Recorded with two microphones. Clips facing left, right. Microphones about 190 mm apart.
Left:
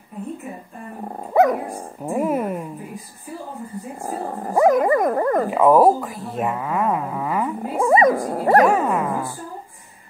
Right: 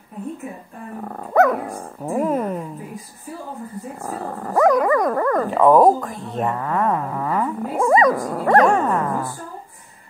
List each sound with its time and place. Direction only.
1.0 s dog: 20° left (ahead or behind)
2.0 s a sound: 5° left (ahead or behind)
4.0 s dog: 30° left (ahead or behind)
5.5 s a sound: 5° left (ahead or behind)
8.1 s dog: 35° left (ahead or behind)
8.6 s dog: 5° left (ahead or behind)